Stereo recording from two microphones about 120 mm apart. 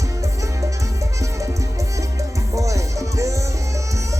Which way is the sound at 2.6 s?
25° right (ahead or behind).